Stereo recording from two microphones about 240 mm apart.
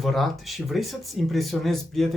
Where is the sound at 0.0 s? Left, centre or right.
Centre.